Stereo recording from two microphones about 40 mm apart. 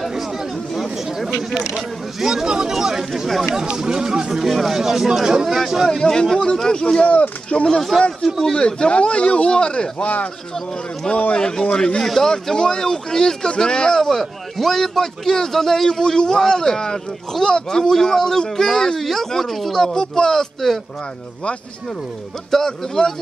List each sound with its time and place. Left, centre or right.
1.8 s speech: centre
4.3 s speech: centre
5.9 s a man's voice: centre
7.9 s a man's voice: centre
8.6 s speech: left
11.3 s speech: centre
12.0 s a man's voice: centre
12.3 s a man's voice: centre
22.5 s a man's voice: centre